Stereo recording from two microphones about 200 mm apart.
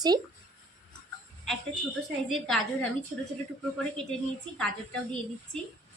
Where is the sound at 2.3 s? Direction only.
Centre (ahead or behind).